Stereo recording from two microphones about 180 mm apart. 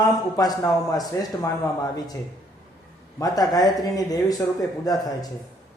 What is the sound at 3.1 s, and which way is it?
A man's voice, 20° left (ahead or behind).